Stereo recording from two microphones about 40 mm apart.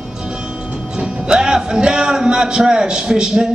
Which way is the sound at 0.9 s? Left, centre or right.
Right.